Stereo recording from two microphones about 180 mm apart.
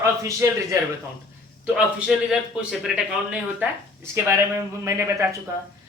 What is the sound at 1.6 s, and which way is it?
A man's voice, 5° right (ahead or behind).